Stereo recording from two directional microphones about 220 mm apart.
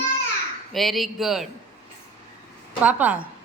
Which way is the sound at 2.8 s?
5° right (ahead or behind).